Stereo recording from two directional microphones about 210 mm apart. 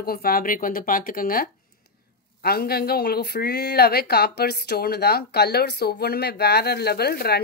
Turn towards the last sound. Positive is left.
turn(degrees=50)  # may be behind; listen again after turning